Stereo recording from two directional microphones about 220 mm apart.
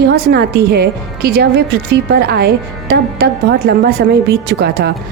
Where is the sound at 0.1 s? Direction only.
45° right (ahead or behind).